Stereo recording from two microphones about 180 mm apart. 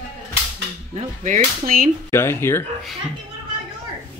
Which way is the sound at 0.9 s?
40° right (ahead or behind).